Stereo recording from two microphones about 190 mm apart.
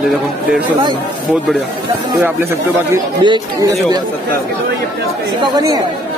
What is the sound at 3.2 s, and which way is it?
Speech, 25° right (ahead or behind).